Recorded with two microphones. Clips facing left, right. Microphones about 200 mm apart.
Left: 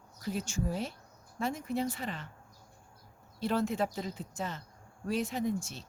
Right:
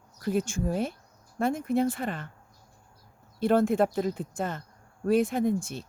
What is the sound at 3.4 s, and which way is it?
Speech, 55° right (ahead or behind).